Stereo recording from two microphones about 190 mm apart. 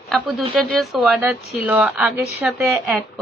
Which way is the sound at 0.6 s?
Centre (ahead or behind).